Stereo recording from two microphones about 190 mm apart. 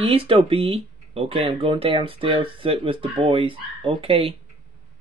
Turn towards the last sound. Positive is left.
turn(degrees=-30)  # may be behind; listen again after turning